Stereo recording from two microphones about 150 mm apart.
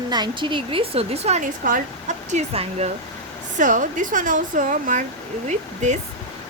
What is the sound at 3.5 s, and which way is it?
Speech, 60° right (ahead or behind).